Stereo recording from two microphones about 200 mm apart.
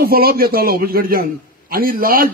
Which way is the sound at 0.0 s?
50° right (ahead or behind).